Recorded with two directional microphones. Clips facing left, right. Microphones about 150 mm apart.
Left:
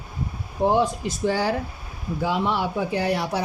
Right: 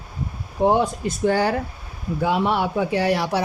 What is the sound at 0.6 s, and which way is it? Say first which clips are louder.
Speech: right 2 dB; 60° right (ahead or behind).